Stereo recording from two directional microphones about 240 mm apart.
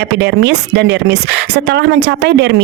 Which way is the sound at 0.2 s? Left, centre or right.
Right.